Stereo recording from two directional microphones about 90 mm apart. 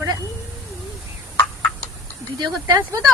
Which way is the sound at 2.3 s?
40° right (ahead or behind).